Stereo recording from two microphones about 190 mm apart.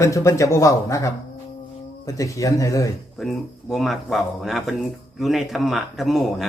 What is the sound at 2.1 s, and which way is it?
Speech, 15° left (ahead or behind).